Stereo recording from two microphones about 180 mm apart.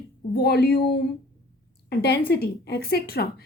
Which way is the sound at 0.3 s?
60° left (ahead or behind).